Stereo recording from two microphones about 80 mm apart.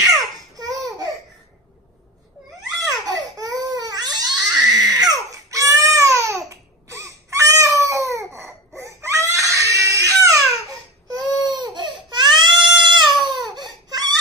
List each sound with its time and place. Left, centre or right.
0.6 s laughter: right
3.1 s crying: right
8.7 s baby cry: right
11.1 s baby cry: right